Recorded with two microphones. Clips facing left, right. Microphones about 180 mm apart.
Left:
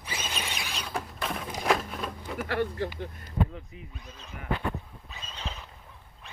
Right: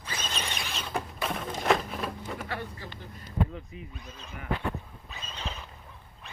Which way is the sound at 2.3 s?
75° left (ahead or behind).